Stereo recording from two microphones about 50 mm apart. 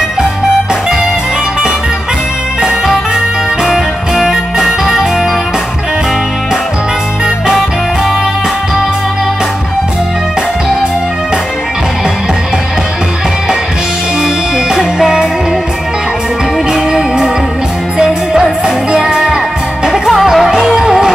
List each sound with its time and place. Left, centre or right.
3.6 s music: centre
14.2 s music: centre
16.7 s music: centre